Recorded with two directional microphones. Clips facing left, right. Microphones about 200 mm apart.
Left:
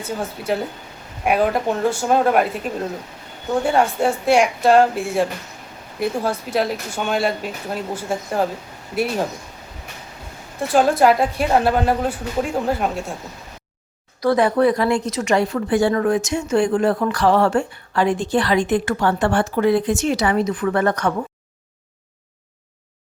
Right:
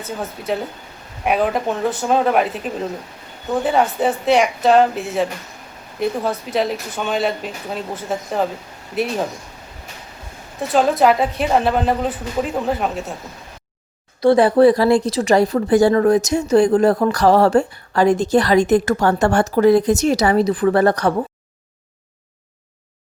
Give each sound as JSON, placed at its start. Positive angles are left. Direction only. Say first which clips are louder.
{"t": 0.2, "sound": "speech", "louder": "even", "side_deg": 0}
{"t": 10.7, "sound": "speech", "louder": "even", "side_deg": 0}
{"t": 14.2, "sound": "speech", "louder": "right 4 dB", "side_deg": -30}